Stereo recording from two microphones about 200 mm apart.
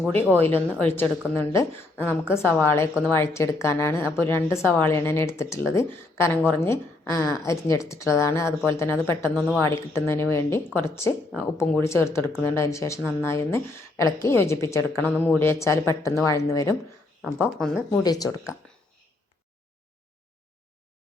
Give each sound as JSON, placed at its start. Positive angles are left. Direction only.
{"t": 0.3, "sound": "speech", "side_deg": 10}
{"t": 17.2, "sound": "speech", "side_deg": -5}
{"t": 17.9, "sound": "speech", "side_deg": 20}